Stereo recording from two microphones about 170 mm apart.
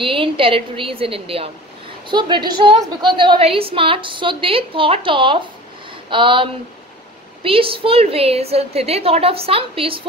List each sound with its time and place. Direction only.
0.0 s a woman's voice: 30° right (ahead or behind)